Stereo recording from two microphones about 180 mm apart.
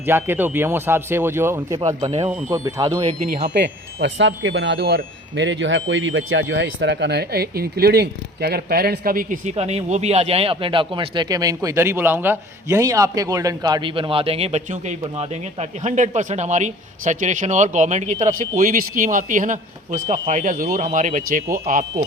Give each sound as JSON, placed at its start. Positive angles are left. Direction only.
{"t": 0.0, "sound": "speech", "side_deg": -10}
{"t": 3.0, "sound": "speech", "side_deg": -35}
{"t": 3.5, "sound": "speech", "side_deg": -75}